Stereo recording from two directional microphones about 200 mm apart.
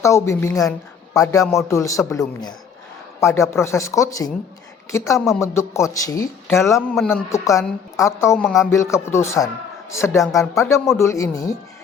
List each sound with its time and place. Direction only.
0.0 s speech: 15° left (ahead or behind)
6.8 s a man's voice: centre (ahead or behind)
7.1 s speech: 15° left (ahead or behind)